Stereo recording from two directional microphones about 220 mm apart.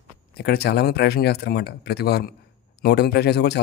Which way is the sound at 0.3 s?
45° left (ahead or behind).